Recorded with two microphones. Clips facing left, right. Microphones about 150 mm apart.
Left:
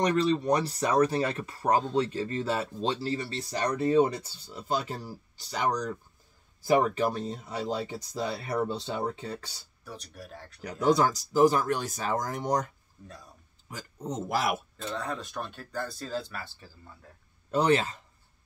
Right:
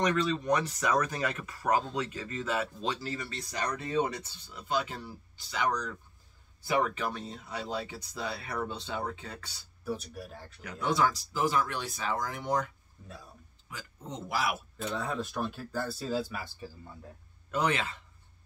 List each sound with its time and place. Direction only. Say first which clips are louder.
0.0 s speech: left 4 dB; 35° left (ahead or behind)
9.8 s speech: right 7 dB; 5° right (ahead or behind)
10.6 s speech: left 5 dB; 35° left (ahead or behind)
14.8 s speech: right 1 dB; 5° right (ahead or behind)
17.5 s a man's voice: left 6 dB; 35° left (ahead or behind)